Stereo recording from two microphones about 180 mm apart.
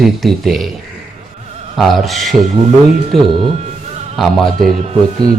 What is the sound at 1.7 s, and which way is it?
A man's voice, centre (ahead or behind).